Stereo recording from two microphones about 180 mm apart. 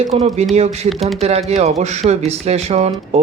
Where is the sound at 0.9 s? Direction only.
Centre (ahead or behind).